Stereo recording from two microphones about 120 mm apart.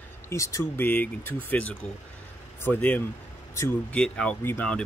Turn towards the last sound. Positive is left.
turn(degrees=20)  # may be behind; listen again after turning